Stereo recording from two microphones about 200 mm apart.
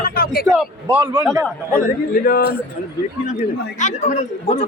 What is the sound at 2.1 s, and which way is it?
Speech, 50° left (ahead or behind).